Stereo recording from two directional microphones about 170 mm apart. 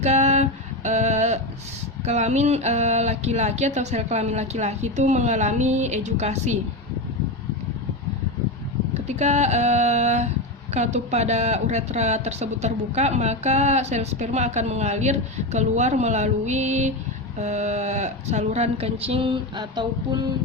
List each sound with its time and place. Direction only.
0.0 s a sound: 40° right (ahead or behind)
2.0 s speech: 40° right (ahead or behind)
9.0 s speech: 40° right (ahead or behind)